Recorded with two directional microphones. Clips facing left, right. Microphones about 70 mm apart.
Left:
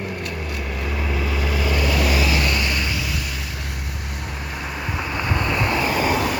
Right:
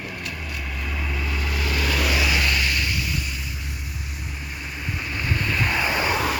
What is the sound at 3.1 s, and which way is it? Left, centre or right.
Vehicle, left.